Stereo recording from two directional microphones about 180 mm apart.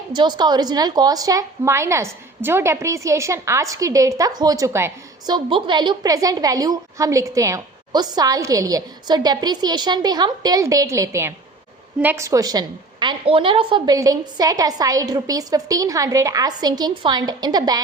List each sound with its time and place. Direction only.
0.1 s a woman's voice: 25° right (ahead or behind)